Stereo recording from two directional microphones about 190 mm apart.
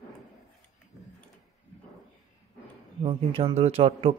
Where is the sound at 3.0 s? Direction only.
30° right (ahead or behind).